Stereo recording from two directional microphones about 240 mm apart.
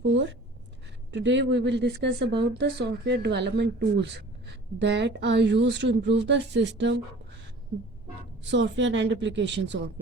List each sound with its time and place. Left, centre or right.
0.0 s speech: right
8.4 s speech: right